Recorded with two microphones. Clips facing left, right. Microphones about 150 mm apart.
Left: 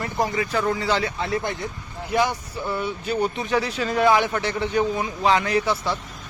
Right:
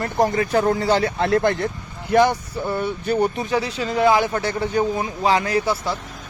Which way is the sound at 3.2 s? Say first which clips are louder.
Right 1 dB; 30° right (ahead or behind).